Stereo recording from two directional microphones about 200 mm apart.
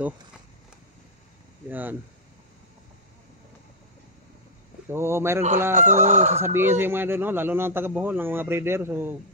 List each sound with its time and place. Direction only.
1.7 s a man's voice: 10° right (ahead or behind)
4.8 s a man's voice: 10° right (ahead or behind)
5.8 s chicken: 35° right (ahead or behind)
6.4 s a man's voice: 10° right (ahead or behind)